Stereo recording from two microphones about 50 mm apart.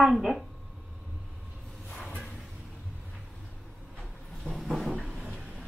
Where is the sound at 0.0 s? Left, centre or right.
Centre.